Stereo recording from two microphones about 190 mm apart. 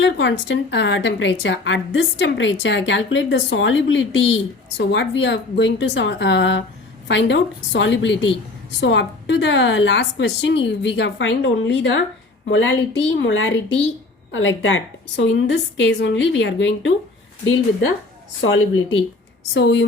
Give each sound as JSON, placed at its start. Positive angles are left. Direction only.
{"t": 0.0, "sound": "a woman's voice", "side_deg": 75}
{"t": 17.4, "sound": "speech", "side_deg": 90}
{"t": 19.5, "sound": "a woman's voice", "side_deg": 75}